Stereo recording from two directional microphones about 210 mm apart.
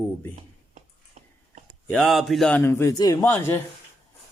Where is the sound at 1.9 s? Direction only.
Centre (ahead or behind).